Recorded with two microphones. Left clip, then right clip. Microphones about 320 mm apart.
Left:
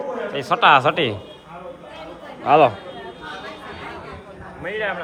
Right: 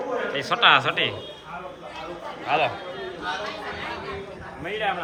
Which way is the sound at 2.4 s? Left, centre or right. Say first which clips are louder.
Left 9 dB; centre.